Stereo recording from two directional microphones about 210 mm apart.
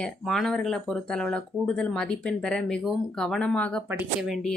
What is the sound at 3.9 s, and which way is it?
Speech, 5° right (ahead or behind).